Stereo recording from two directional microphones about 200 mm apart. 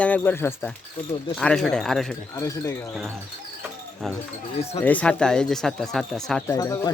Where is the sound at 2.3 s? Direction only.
15° left (ahead or behind).